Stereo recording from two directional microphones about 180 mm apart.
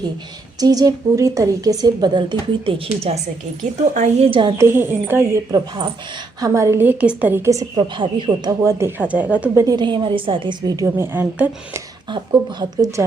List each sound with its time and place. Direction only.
0.6 s a woman's voice: 20° right (ahead or behind); by 4.3 s 40° right (ahead or behind)
4.3 s a woman's voice: 25° right (ahead or behind)
4.5 s a woman's voice: 15° right (ahead or behind)
7.8 s a woman's voice: 25° right (ahead or behind); by 9.6 s 10° right (ahead or behind)
9.6 s a woman's voice: 25° right (ahead or behind)
12.1 s a woman's voice: 20° right (ahead or behind)